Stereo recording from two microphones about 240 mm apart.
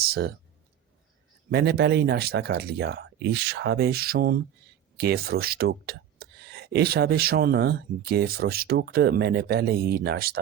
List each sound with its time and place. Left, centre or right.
0.0 s speech: right
1.5 s speech: right